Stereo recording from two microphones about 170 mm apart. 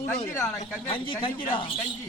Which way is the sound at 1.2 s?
30° left (ahead or behind).